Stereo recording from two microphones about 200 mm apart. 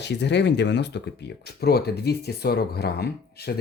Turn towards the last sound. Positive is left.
turn(degrees=55)  # may be behind; listen again after turning